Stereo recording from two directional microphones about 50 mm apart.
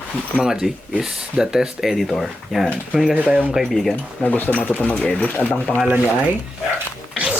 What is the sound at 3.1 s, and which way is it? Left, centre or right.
Speech, right.